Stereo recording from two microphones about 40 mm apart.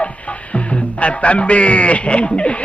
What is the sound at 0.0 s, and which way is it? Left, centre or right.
Music, left.